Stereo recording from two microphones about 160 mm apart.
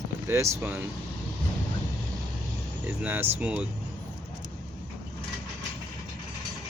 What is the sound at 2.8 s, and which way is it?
Speech, 10° right (ahead or behind).